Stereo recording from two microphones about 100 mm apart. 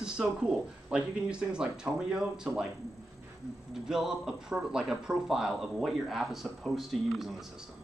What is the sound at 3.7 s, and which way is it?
Speech, 5° right (ahead or behind).